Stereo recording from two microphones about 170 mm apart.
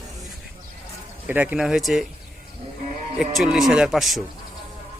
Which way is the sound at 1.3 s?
10° right (ahead or behind).